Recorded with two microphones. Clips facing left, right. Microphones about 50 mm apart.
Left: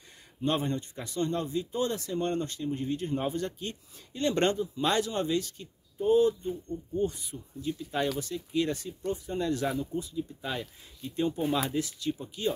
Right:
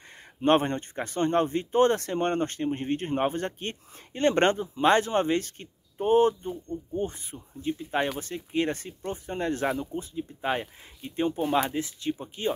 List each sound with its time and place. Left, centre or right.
0.4 s speech: right
6.5 s speech: right